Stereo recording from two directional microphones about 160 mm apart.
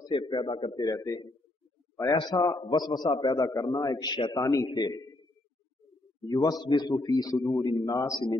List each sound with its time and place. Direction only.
0.0 s a man's voice: 30° left (ahead or behind)
0.8 s a man's voice: 20° left (ahead or behind)
6.2 s a man's voice: 25° left (ahead or behind)